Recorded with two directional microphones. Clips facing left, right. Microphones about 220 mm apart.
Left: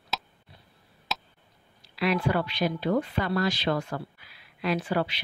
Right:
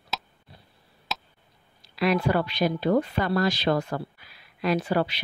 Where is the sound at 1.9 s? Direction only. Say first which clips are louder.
Right 3 dB; 45° right (ahead or behind).